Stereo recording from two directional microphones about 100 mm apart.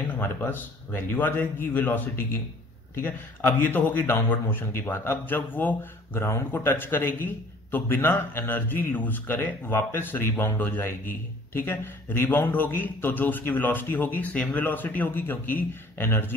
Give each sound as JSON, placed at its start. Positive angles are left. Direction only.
{"t": 0.1, "sound": "a man's voice", "side_deg": 20}